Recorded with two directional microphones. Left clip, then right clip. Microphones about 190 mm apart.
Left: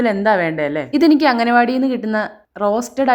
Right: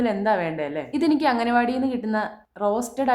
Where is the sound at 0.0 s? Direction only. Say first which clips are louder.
Left 7 dB; 30° left (ahead or behind).